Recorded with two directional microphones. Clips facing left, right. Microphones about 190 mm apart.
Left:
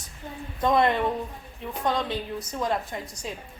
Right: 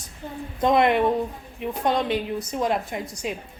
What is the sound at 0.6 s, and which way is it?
A woman's voice, 20° right (ahead or behind).